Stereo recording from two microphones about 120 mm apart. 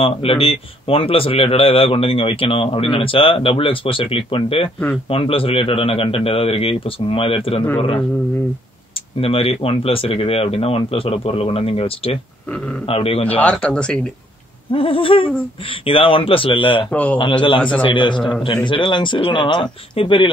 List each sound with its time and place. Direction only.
0.0 s a man's voice: 50° left (ahead or behind)
9.2 s a man's voice: 50° left (ahead or behind)
13.4 s speech: 10° left (ahead or behind)
14.7 s a man's voice: 50° left (ahead or behind)
16.9 s speech: 15° left (ahead or behind)
17.2 s a man's voice: 45° left (ahead or behind)
17.6 s speech: 10° left (ahead or behind)
17.8 s a man's voice: 45° left (ahead or behind)